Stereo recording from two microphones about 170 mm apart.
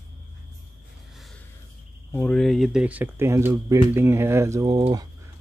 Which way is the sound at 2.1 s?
5° left (ahead or behind).